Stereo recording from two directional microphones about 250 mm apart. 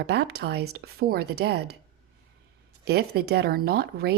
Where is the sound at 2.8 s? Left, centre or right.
Right.